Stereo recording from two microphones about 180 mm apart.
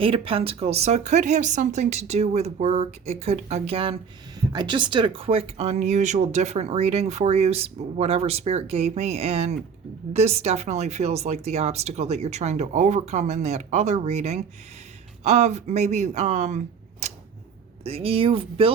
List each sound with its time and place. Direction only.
0.0 s speech: 30° right (ahead or behind)
17.8 s speech: 35° right (ahead or behind)